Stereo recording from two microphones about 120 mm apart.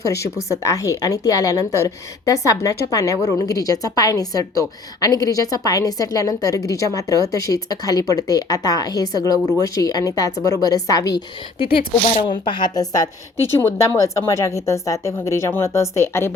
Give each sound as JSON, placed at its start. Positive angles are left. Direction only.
{"t": 0.0, "sound": "a woman's voice", "side_deg": 25}
{"t": 12.2, "sound": "a woman's voice", "side_deg": 40}